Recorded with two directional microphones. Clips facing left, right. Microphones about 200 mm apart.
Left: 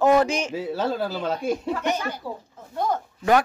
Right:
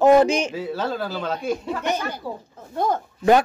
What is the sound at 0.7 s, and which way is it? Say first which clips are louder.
Speech: left 4 dB; 25° left (ahead or behind).